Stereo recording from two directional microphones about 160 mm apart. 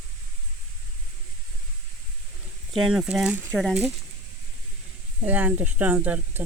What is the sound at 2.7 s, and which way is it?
Speech, centre (ahead or behind).